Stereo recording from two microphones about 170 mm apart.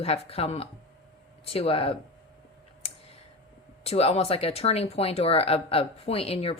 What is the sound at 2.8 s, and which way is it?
Clicking, 35° left (ahead or behind).